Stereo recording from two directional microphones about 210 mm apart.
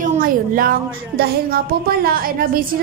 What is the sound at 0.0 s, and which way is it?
Speech, 40° right (ahead or behind).